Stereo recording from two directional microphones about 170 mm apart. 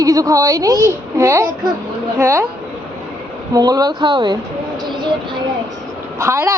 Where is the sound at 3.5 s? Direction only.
20° right (ahead or behind).